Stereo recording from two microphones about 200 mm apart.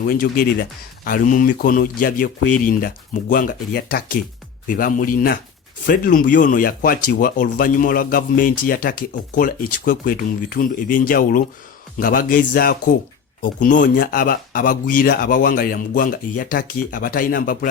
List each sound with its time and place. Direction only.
0.1 s speech: 45° left (ahead or behind)